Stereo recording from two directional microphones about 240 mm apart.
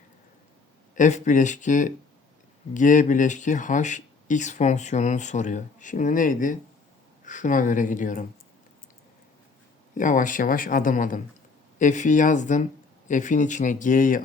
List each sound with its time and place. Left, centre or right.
0.9 s speech: left
9.9 s speech: left